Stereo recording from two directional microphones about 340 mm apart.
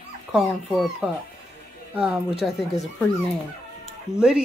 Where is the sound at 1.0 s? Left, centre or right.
Centre.